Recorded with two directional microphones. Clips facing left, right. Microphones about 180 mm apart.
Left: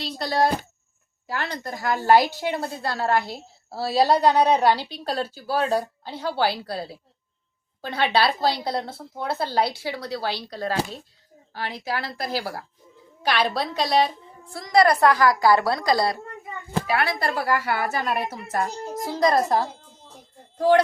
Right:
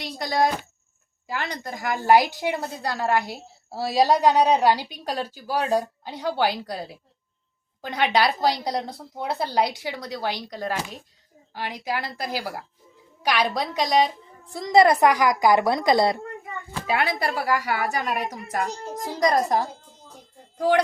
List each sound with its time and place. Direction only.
0.0 s a woman's voice: 15° right (ahead or behind)